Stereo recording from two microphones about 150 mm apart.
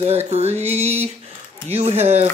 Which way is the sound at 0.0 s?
45° right (ahead or behind).